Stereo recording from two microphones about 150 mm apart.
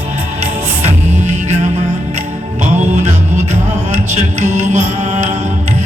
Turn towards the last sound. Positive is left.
turn(degrees=-50)  # may be behind; listen again after turning